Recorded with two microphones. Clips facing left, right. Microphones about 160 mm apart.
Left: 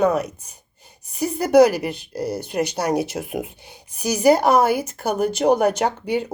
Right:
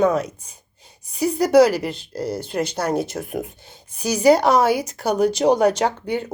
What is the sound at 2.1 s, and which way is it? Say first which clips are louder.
Speech: even; centre (ahead or behind).